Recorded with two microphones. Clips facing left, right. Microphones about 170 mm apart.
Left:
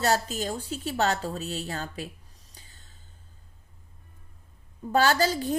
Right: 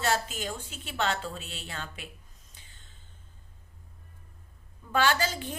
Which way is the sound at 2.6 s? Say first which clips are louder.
Left 3 dB; 40° left (ahead or behind).